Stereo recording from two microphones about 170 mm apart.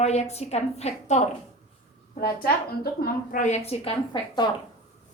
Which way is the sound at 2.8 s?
65° left (ahead or behind).